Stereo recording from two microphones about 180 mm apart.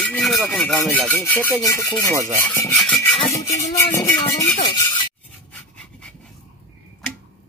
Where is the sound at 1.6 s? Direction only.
20° left (ahead or behind).